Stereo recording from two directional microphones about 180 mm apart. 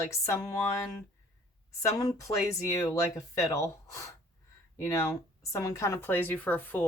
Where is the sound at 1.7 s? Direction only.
20° left (ahead or behind).